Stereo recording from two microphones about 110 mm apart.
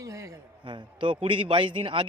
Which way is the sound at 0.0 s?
30° right (ahead or behind).